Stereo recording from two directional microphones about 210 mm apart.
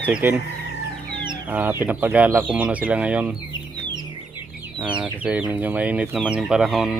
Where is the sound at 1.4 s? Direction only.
10° right (ahead or behind).